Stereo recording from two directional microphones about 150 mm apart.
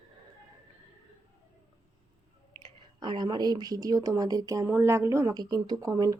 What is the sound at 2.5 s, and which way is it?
Speech, 30° right (ahead or behind).